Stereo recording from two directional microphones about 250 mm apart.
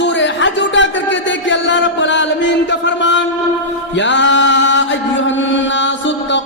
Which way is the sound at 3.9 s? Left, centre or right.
Left.